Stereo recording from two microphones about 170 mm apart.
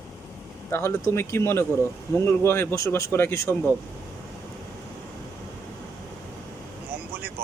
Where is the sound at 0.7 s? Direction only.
15° left (ahead or behind).